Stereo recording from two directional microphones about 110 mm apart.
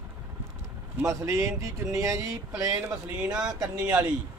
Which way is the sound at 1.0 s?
30° right (ahead or behind).